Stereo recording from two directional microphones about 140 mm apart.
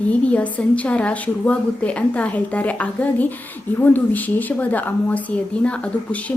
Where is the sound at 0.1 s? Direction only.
10° left (ahead or behind).